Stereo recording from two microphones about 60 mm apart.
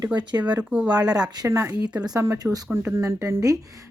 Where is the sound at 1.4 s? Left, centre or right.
Right.